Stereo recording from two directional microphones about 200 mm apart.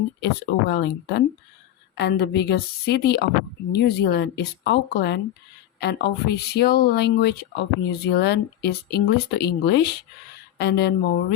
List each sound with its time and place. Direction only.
0.2 s speech: 60° left (ahead or behind)